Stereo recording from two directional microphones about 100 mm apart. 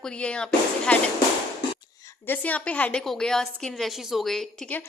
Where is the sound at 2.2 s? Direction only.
15° left (ahead or behind).